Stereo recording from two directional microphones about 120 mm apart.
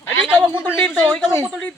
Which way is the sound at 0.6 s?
15° left (ahead or behind).